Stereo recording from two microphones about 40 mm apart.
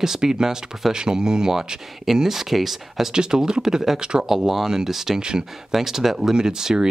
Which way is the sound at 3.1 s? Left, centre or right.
Centre.